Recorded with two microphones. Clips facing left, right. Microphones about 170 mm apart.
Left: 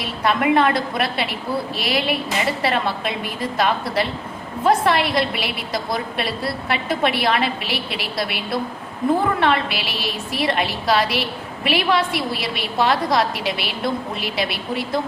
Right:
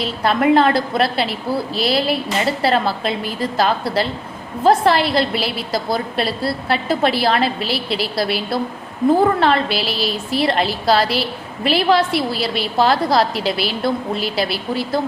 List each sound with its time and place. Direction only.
0.0 s a woman's voice: 30° right (ahead or behind)